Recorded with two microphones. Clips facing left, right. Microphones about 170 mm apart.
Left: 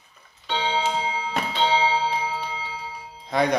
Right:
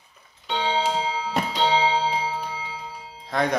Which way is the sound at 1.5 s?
35° right (ahead or behind).